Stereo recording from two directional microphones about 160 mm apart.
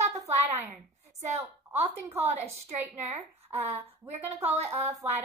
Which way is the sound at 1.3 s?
40° right (ahead or behind).